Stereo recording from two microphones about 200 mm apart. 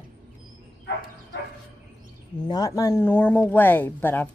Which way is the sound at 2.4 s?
20° left (ahead or behind).